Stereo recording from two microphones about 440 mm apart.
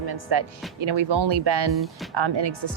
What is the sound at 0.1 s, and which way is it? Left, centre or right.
Speech, right.